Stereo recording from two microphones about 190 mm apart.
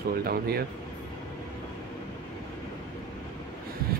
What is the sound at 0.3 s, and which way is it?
Speech, 55° right (ahead or behind).